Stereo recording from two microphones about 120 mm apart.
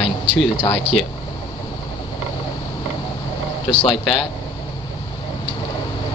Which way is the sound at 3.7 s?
45° left (ahead or behind).